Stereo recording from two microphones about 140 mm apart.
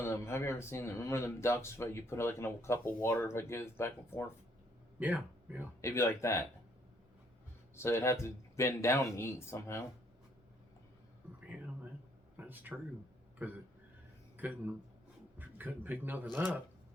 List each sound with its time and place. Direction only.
0.0 s speech: 20° left (ahead or behind)
4.9 s speech: 10° right (ahead or behind)
5.8 s speech: 20° left (ahead or behind)
7.8 s speech: 20° left (ahead or behind)
11.5 s a sound: 10° right (ahead or behind)
13.4 s a man's voice: 15° right (ahead or behind)